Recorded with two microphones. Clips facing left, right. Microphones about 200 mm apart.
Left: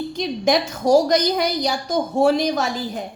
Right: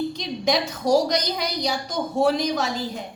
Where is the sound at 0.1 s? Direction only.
50° left (ahead or behind).